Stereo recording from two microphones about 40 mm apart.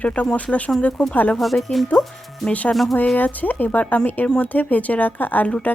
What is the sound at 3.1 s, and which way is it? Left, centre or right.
Speech, left.